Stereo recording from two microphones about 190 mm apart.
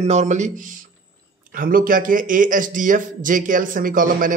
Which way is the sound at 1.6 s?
45° right (ahead or behind).